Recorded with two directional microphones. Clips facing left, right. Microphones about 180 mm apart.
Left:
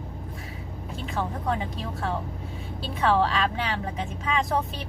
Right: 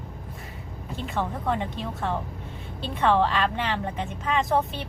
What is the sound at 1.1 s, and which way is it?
A woman's voice, centre (ahead or behind).